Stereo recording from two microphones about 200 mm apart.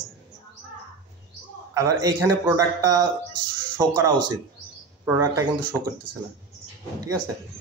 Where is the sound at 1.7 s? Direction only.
15° right (ahead or behind).